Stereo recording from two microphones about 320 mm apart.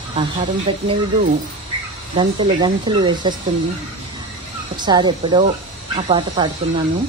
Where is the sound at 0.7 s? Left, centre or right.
Centre.